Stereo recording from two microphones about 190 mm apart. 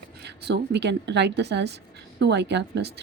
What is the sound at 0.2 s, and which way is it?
A woman's voice, 60° right (ahead or behind).